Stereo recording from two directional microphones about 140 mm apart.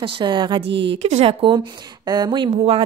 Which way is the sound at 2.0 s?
30° right (ahead or behind).